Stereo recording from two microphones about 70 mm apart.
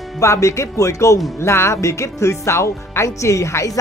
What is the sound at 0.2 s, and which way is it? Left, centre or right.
Speech, left.